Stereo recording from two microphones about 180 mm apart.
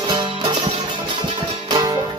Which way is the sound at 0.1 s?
25° right (ahead or behind).